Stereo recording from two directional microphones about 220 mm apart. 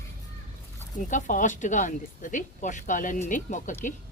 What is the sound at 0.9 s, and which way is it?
Speech, 35° left (ahead or behind).